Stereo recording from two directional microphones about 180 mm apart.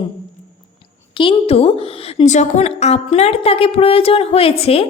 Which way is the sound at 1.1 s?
30° left (ahead or behind).